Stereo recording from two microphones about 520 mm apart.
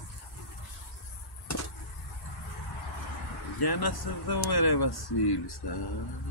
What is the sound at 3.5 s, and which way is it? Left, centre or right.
Speech, left.